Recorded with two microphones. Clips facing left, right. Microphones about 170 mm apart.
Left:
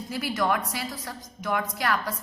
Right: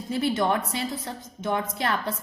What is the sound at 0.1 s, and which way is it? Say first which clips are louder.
A woman's voice: right 3 dB; 25° right (ahead or behind).